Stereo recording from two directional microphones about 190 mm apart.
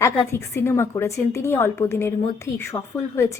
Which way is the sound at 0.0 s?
15° left (ahead or behind).